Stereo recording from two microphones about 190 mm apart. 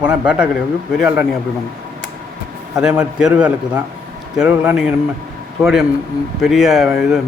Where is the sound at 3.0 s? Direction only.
5° right (ahead or behind).